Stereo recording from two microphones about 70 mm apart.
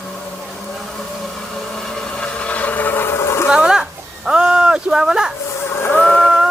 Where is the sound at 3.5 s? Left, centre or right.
Centre.